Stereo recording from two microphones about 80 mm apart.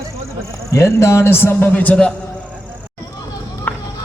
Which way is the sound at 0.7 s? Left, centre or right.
Left.